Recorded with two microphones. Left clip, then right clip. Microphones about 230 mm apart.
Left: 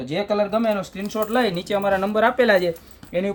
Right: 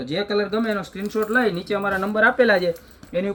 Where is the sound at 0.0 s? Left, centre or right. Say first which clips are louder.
Left 1 dB; left.